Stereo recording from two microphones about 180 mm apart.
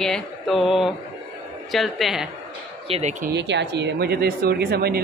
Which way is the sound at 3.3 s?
75° right (ahead or behind).